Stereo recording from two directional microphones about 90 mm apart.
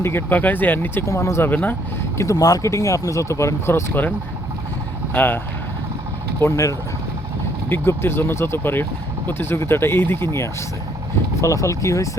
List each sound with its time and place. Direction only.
0.0 s speech: 25° left (ahead or behind)
1.0 s speech: 35° left (ahead or behind)
2.1 s speech: 35° left (ahead or behind)
5.1 s speech: 20° left (ahead or behind)
6.4 s speech: 35° left (ahead or behind)
7.7 s speech: 25° left (ahead or behind)